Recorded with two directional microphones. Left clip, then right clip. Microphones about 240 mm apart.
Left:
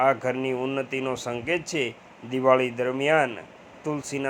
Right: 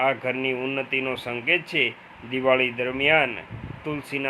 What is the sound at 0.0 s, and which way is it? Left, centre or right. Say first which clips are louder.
A man's voice: left 1 dB; centre.